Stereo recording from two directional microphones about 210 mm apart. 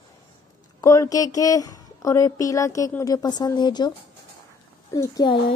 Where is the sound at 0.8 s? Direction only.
15° left (ahead or behind).